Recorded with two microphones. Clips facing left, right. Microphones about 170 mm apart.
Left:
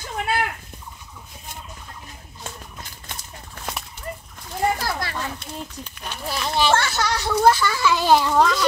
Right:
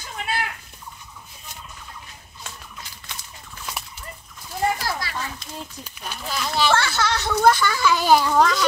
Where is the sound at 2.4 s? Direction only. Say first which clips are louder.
Left 3 dB; 50° left (ahead or behind).